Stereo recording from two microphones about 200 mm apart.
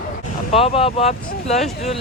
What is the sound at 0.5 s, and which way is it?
Speech, 30° left (ahead or behind).